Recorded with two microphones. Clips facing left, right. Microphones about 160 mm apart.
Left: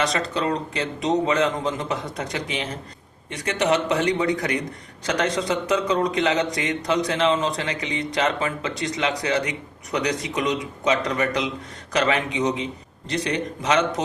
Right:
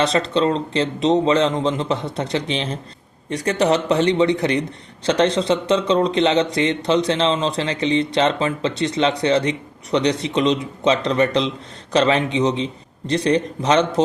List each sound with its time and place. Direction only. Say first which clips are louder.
0.0 s a man's voice: right 6 dB; 30° right (ahead or behind)